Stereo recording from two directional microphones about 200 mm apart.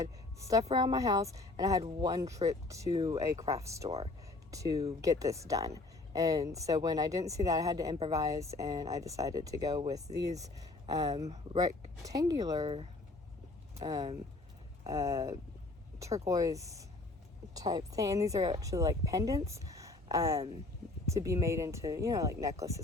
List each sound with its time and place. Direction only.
0.0 s speech: 15° right (ahead or behind)
3.8 s speech: 30° right (ahead or behind)
4.5 s speech: 15° right (ahead or behind)
12.5 s speech: 30° right (ahead or behind)
13.7 s speech: 15° right (ahead or behind)
19.5 s a sound: 15° right (ahead or behind)
21.1 s speech: 15° right (ahead or behind)